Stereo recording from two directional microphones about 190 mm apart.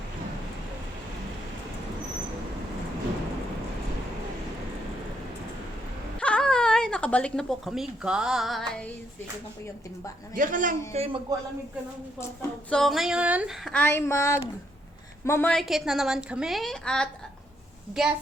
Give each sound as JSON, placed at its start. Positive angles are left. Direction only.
{"t": 6.1, "sound": "speech", "side_deg": 5}
{"t": 10.3, "sound": "a man's voice", "side_deg": -45}
{"t": 12.4, "sound": "a woman's voice", "side_deg": 5}
{"t": 13.7, "sound": "a woman's voice", "side_deg": 10}